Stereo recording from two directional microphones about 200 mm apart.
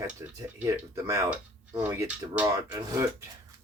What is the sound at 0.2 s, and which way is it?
Speech, 15° right (ahead or behind).